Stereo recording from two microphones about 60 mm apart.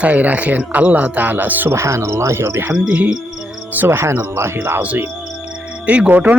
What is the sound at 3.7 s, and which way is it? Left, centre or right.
Cricket, right.